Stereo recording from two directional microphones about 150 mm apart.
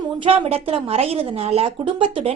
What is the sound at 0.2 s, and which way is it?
A woman's voice, 40° right (ahead or behind).